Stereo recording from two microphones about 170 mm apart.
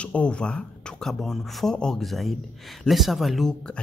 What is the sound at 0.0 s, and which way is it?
Speech, 5° left (ahead or behind).